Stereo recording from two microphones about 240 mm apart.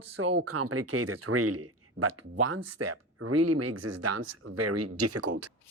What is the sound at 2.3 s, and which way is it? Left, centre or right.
Speech, right.